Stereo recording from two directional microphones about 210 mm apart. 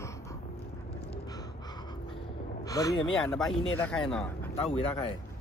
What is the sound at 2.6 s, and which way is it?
Speech, 15° left (ahead or behind).